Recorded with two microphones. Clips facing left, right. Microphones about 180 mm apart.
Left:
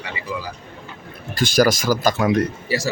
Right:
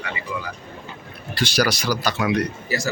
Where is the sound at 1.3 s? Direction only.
45° left (ahead or behind).